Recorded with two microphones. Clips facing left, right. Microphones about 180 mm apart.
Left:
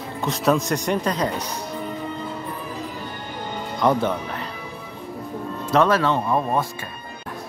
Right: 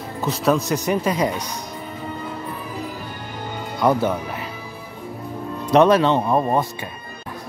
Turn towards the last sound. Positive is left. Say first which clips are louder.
# right 3 dB
turn(degrees=-15)  # may be behind; listen again after turning